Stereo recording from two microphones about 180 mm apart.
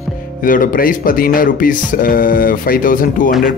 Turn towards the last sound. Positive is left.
turn(degrees=50)  # may be behind; listen again after turning